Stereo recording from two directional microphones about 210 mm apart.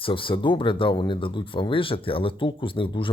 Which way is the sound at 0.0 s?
25° left (ahead or behind).